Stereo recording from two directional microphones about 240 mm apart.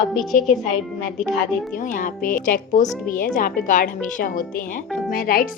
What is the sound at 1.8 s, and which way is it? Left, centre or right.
A woman's voice, left.